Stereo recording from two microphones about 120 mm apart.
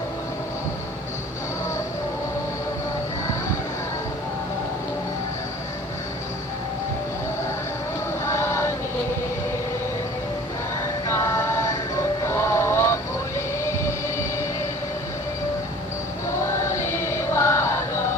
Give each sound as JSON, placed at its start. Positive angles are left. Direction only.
{"t": 8.2, "sound": "vehicle", "side_deg": 20}
{"t": 11.3, "sound": "music", "side_deg": 25}
{"t": 16.6, "sound": "chant", "side_deg": 20}